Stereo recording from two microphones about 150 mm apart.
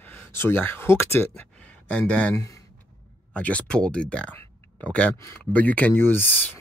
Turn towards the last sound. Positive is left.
turn(degrees=10)  # may be behind; listen again after turning